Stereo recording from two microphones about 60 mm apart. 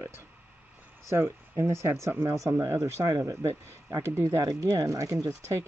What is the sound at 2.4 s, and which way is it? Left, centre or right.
Speech, right.